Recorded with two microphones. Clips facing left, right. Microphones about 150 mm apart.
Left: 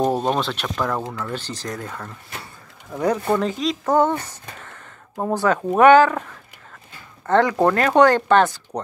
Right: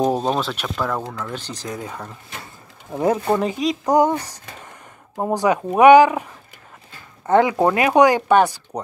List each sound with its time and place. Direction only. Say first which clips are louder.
0.2 s speech: even; 5° right (ahead or behind)
1.0 s speech: left 1 dB; 5° left (ahead or behind)
1.5 s speech: even; 10° right (ahead or behind)
2.9 s speech: right 1 dB; 25° right (ahead or behind)